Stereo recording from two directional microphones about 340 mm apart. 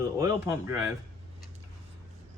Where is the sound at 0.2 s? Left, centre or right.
Centre.